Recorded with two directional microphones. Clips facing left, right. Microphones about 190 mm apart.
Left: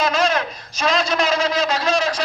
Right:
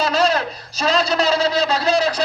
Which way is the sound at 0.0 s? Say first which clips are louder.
Right 1 dB; 35° right (ahead or behind).